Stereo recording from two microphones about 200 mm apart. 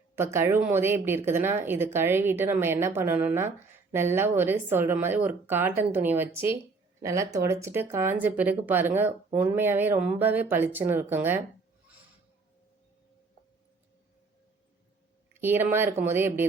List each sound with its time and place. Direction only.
0.2 s speech: 10° right (ahead or behind)
15.3 s speech: 10° right (ahead or behind)